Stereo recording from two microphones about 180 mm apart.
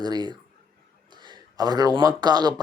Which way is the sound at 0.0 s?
25° right (ahead or behind).